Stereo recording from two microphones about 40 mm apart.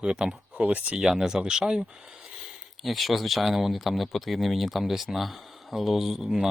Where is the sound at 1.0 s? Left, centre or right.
Centre.